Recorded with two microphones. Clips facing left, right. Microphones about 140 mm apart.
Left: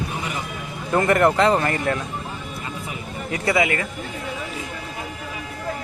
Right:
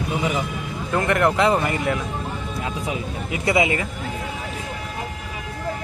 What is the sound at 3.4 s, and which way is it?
Speech, 20° right (ahead or behind).